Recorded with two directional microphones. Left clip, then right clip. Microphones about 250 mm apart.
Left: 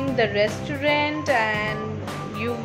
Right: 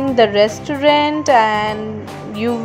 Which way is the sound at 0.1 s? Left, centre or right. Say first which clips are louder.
Right 9 dB; right.